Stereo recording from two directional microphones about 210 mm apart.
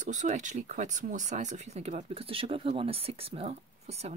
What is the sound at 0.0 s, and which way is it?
Speech, 35° right (ahead or behind).